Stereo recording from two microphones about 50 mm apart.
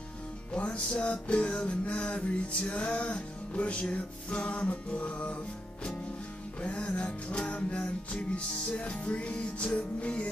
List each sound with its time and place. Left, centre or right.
0.5 s music: left
6.6 s music: left